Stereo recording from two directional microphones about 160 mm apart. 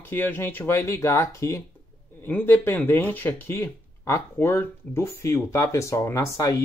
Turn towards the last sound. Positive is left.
turn(degrees=20)  # may be behind; listen again after turning